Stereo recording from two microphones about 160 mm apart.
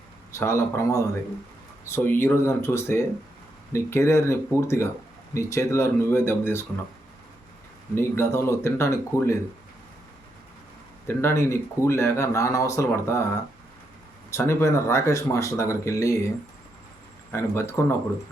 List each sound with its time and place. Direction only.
0.3 s speech: 15° left (ahead or behind)
7.9 s speech: 15° left (ahead or behind)
11.1 s speech: 15° left (ahead or behind)
14.3 s speech: 15° left (ahead or behind)
17.3 s speech: 15° left (ahead or behind)